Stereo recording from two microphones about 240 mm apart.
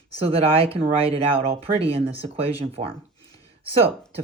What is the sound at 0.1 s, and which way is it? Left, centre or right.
Speech, right.